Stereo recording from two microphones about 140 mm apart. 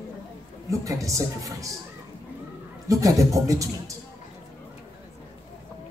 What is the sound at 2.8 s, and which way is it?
Speech, 25° right (ahead or behind).